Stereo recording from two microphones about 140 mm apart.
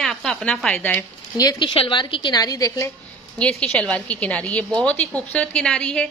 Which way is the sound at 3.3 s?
5° left (ahead or behind).